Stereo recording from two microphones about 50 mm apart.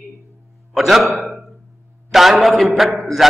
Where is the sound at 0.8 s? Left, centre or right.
Centre.